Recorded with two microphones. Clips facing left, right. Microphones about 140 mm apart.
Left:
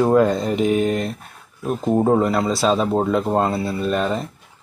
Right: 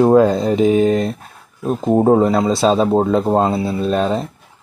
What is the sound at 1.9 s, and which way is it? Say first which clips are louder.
Speech: right 5 dB; 25° right (ahead or behind).